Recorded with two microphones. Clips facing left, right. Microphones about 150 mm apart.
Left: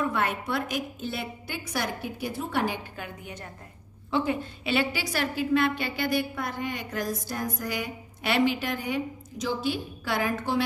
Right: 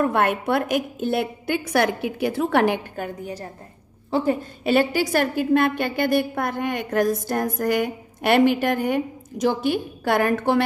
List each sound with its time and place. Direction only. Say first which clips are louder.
0.0 s a woman's voice: right 7 dB; 55° right (ahead or behind)
3.0 s a woman's voice: right 9 dB; 35° right (ahead or behind); by 10.6 s 60° right (ahead or behind)